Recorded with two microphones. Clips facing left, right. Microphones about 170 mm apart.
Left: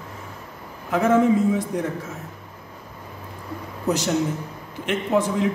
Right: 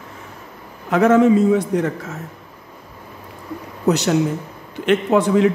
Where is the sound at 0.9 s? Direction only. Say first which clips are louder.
Right 5 dB; 75° right (ahead or behind).